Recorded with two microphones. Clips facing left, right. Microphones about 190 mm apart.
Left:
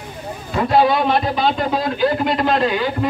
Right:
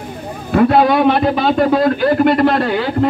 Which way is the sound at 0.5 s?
60° right (ahead or behind).